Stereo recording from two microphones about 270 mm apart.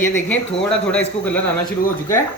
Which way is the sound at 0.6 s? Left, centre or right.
Centre.